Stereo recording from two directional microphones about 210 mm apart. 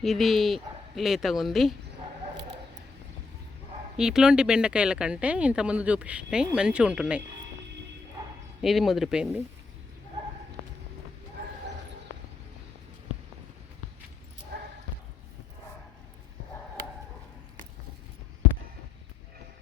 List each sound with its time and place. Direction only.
0.0 s speech: centre (ahead or behind)
3.9 s speech: 5° right (ahead or behind)
8.6 s speech: centre (ahead or behind)
14.5 s a sound: 55° right (ahead or behind)